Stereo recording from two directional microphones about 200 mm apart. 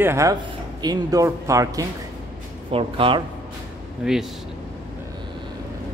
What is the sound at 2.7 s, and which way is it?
Speech, 25° right (ahead or behind).